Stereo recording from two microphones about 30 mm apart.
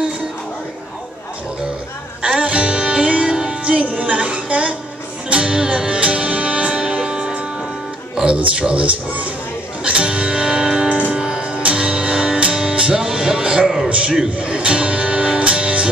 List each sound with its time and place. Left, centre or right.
2.2 s music: right
2.5 s music: right
4.2 s music: right
8.5 s speech: right
9.8 s music: right
13.8 s a man's voice: right
15.3 s music: right